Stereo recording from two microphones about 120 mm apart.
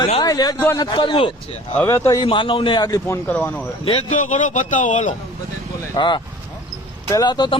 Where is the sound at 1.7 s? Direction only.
20° left (ahead or behind).